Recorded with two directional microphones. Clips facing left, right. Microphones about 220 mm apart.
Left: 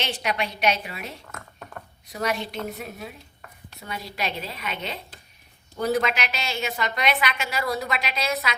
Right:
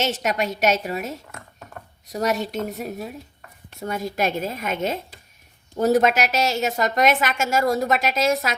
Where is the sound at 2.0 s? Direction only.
40° right (ahead or behind).